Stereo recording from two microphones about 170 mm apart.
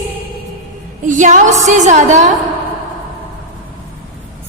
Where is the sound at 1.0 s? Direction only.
50° right (ahead or behind).